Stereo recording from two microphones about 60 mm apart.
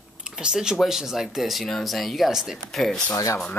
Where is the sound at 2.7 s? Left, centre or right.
Centre.